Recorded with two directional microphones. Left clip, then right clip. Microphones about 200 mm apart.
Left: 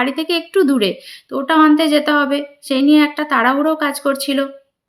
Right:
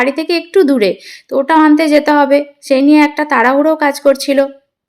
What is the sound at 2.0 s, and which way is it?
Speech, 50° left (ahead or behind).